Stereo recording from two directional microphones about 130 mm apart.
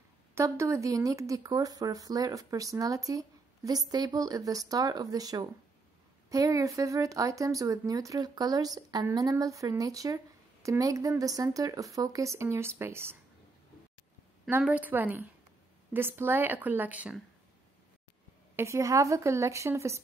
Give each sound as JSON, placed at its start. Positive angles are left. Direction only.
{"t": 0.3, "sound": "speech", "side_deg": -20}
{"t": 14.6, "sound": "a woman's voice", "side_deg": -10}
{"t": 18.6, "sound": "speech", "side_deg": -20}